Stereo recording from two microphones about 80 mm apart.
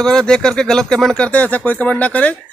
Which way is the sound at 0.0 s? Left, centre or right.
Centre.